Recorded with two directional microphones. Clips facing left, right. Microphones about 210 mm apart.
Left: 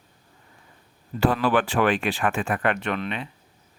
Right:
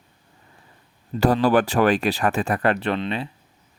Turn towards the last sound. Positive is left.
turn(degrees=-30)  # may be behind; listen again after turning